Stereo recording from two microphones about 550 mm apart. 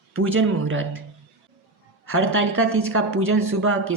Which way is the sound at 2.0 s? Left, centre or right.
Right.